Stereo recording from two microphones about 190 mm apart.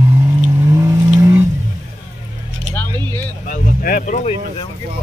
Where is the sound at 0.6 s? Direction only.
15° right (ahead or behind).